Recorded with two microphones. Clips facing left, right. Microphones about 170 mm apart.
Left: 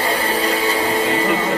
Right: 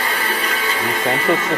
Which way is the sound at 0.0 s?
35° left (ahead or behind).